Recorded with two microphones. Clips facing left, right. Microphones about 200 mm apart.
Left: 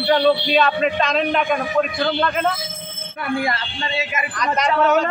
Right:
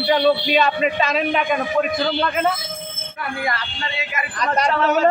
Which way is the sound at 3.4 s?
25° left (ahead or behind).